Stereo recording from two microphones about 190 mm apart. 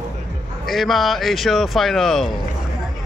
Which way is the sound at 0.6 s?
Centre (ahead or behind).